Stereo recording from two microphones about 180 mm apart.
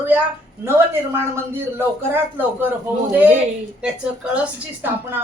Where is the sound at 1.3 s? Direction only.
10° right (ahead or behind).